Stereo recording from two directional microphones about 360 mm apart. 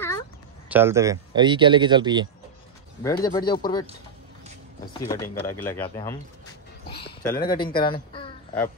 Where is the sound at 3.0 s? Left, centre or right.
Centre.